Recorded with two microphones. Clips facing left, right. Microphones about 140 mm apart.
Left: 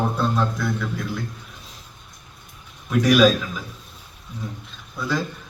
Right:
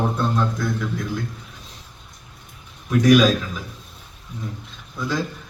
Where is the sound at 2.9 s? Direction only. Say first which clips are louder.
Right 1 dB; centre (ahead or behind).